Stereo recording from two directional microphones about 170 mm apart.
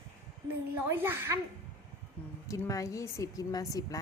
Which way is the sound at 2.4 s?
20° left (ahead or behind).